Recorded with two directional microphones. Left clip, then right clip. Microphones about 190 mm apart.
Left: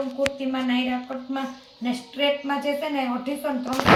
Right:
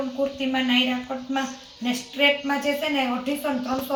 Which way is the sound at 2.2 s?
5° left (ahead or behind).